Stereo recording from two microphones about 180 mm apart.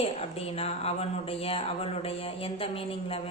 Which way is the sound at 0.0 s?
35° left (ahead or behind).